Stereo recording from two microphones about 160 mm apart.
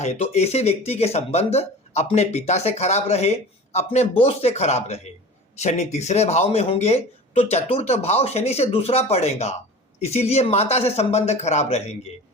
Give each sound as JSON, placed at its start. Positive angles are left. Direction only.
{"t": 0.0, "sound": "speech", "side_deg": 45}